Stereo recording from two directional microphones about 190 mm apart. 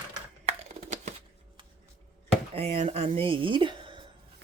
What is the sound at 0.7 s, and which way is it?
Shuffling cards, 35° right (ahead or behind).